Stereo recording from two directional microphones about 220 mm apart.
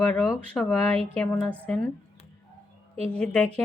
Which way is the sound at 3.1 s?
5° left (ahead or behind).